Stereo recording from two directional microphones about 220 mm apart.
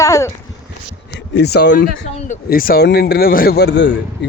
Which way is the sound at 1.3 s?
50° left (ahead or behind).